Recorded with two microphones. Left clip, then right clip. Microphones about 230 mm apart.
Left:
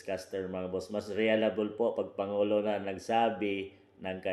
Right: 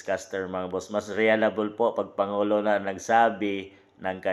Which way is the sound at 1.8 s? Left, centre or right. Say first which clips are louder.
Right 9 dB; right.